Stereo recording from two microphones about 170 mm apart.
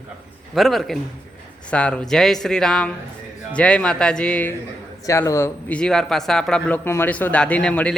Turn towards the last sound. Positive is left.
turn(degrees=5)  # may be behind; listen again after turning